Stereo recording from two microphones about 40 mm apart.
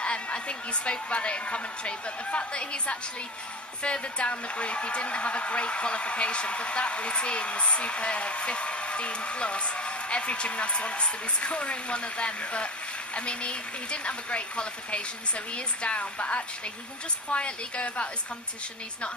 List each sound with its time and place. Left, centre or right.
0.0 s a woman's voice: left